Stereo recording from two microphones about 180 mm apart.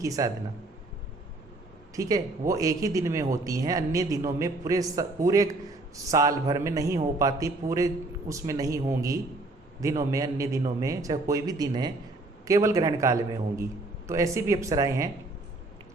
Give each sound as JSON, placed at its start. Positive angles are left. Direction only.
{"t": 0.0, "sound": "speech", "side_deg": -20}
{"t": 2.0, "sound": "speech", "side_deg": -20}